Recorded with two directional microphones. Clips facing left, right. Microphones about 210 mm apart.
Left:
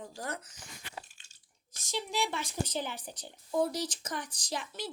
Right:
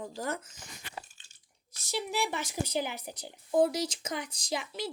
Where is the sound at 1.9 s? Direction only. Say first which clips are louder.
Right 2 dB; 10° right (ahead or behind).